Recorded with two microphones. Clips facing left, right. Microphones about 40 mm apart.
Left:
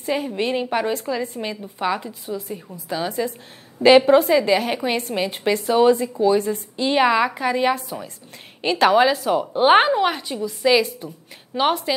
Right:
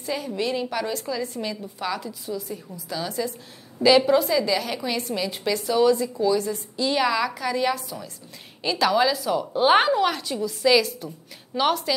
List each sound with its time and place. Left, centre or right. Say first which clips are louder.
0.0 s a woman's voice: left 4 dB; left